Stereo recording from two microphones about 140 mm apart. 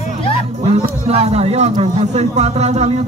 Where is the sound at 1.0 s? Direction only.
50° right (ahead or behind).